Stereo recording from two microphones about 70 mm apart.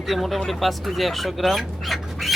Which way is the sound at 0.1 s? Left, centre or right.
Centre.